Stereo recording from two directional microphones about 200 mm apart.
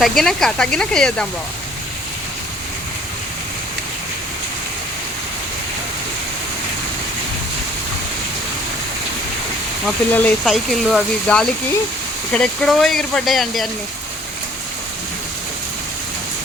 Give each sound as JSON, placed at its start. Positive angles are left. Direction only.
{"t": 0.0, "sound": "speech", "side_deg": 0}
{"t": 9.8, "sound": "speech", "side_deg": 10}